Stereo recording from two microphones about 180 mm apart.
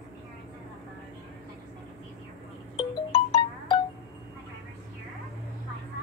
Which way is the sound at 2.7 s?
30° left (ahead or behind).